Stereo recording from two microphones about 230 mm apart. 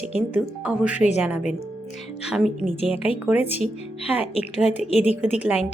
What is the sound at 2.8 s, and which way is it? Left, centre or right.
Speech, left.